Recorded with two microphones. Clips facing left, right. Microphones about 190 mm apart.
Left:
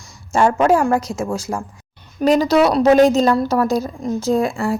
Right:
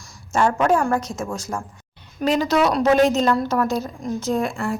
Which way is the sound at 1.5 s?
30° left (ahead or behind).